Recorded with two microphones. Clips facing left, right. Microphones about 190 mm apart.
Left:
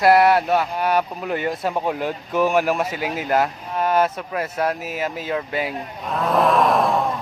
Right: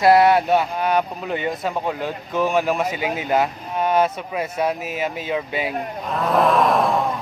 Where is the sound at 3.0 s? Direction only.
20° right (ahead or behind).